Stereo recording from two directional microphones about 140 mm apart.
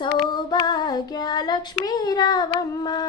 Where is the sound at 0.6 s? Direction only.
30° left (ahead or behind).